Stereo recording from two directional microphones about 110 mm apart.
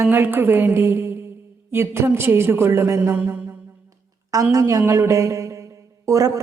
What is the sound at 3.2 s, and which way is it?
Mantra, 10° right (ahead or behind).